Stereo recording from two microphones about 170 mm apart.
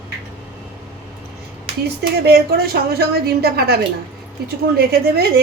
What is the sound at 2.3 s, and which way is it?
A woman's voice, 65° right (ahead or behind).